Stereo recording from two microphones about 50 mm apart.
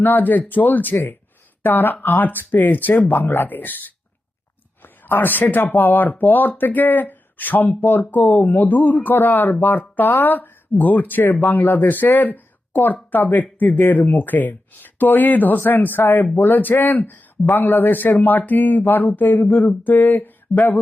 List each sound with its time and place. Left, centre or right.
0.0 s speech: left
5.0 s speech: left